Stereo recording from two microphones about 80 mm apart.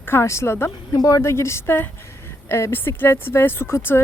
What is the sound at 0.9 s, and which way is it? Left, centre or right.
A woman's voice, left.